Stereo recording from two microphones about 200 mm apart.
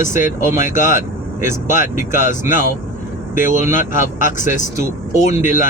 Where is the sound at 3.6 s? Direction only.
40° left (ahead or behind).